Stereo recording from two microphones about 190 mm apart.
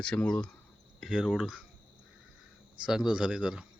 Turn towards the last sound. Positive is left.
turn(degrees=-5)  # may be behind; listen again after turning